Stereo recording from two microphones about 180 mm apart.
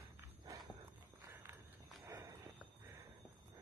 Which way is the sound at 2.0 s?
15° right (ahead or behind).